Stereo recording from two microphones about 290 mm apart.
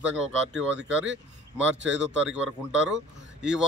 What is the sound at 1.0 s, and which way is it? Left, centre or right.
Speech, right.